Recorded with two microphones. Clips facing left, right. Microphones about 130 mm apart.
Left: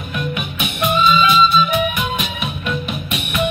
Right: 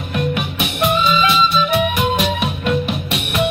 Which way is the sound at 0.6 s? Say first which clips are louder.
Left 1 dB; 65° right (ahead or behind).